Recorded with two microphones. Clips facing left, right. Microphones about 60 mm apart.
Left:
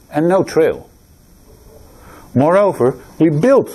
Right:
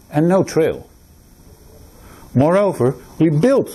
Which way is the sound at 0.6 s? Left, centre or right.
Centre.